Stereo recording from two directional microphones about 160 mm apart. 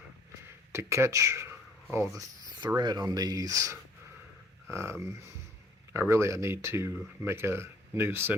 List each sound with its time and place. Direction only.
0.7 s speech: 15° right (ahead or behind)